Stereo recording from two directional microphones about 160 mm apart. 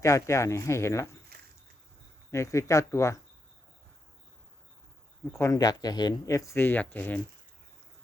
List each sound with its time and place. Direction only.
0.0 s speech: 20° left (ahead or behind)
1.3 s a sound: 75° right (ahead or behind)
2.3 s speech: 20° left (ahead or behind)
5.4 s speech: 20° left (ahead or behind)